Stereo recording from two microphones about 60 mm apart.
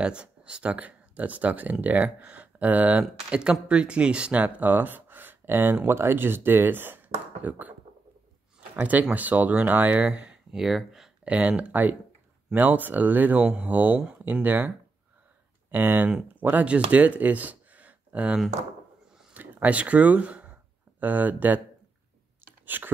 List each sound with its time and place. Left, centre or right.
0.0 s speech: centre
9.1 s speech: right
10.5 s speech: centre
11.2 s speech: right
15.7 s speech: right
22.7 s speech: right